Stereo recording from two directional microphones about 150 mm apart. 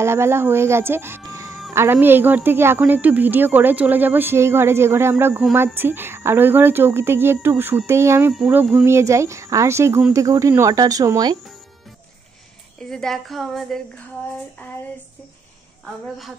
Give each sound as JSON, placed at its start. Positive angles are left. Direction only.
{"t": 0.0, "sound": "speech", "side_deg": -15}
{"t": 1.2, "sound": "music", "side_deg": -20}
{"t": 1.7, "sound": "speech", "side_deg": -15}
{"t": 8.8, "sound": "speech", "side_deg": -20}
{"t": 12.9, "sound": "a woman's voice", "side_deg": 0}
{"t": 15.8, "sound": "a woman's voice", "side_deg": 0}